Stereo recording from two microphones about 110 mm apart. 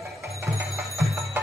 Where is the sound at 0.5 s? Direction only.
25° right (ahead or behind).